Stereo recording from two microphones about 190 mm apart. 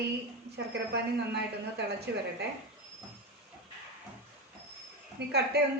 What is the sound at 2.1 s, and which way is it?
Speech, 60° right (ahead or behind).